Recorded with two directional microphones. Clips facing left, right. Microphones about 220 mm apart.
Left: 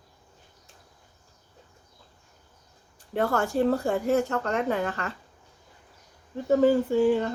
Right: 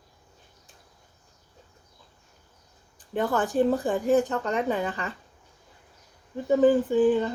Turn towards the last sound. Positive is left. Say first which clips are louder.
# right 1 dB
turn(degrees=-15)  # may be behind; listen again after turning